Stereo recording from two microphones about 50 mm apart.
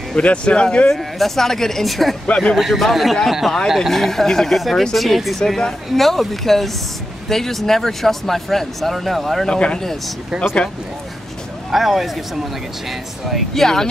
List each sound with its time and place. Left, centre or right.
0.1 s speech: left
0.9 s speech: centre
9.5 s speech: centre
9.8 s speech: centre
11.7 s speech: centre
13.6 s speech: centre